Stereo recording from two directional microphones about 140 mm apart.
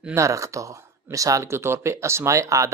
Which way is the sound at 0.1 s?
20° right (ahead or behind).